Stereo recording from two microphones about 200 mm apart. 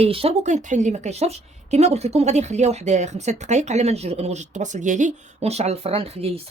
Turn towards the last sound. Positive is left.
turn(degrees=-30)  # may be behind; listen again after turning